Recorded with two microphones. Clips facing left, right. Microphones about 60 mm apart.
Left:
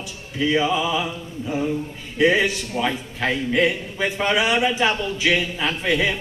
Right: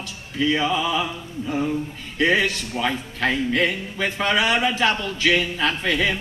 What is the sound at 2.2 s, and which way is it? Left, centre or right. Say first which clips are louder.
A man's voice: left 2 dB; centre.